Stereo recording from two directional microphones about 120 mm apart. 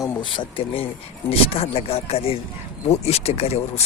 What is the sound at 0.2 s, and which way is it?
Speech, 45° left (ahead or behind).